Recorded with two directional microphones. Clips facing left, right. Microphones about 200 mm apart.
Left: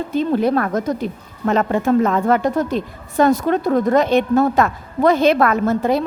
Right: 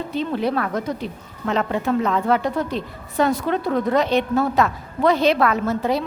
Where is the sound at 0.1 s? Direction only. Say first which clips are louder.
Left 6 dB; 45° left (ahead or behind).